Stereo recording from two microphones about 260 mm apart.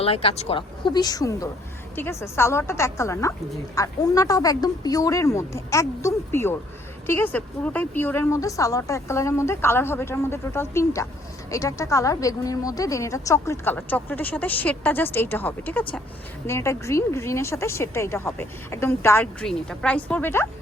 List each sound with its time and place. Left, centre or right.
0.0 s a woman's voice: left